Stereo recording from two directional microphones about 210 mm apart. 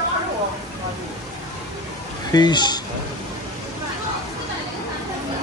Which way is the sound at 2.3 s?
20° left (ahead or behind).